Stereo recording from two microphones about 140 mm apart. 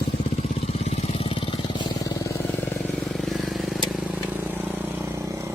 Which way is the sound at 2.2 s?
15° left (ahead or behind).